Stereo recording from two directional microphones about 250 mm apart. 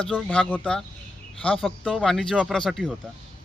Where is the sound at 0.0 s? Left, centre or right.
Centre.